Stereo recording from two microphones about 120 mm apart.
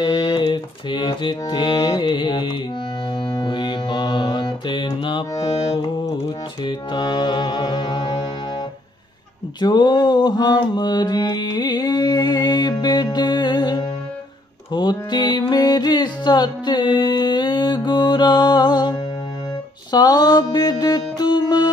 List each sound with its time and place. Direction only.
0.0 s mantra: 35° left (ahead or behind)
3.3 s music: 40° left (ahead or behind)
5.7 s carnatic music: 30° left (ahead or behind)
6.6 s music: 40° left (ahead or behind)
9.6 s mantra: 35° left (ahead or behind)
14.7 s music: 40° left (ahead or behind)